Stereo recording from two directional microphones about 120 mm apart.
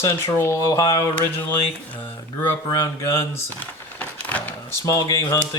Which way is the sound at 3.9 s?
15° left (ahead or behind).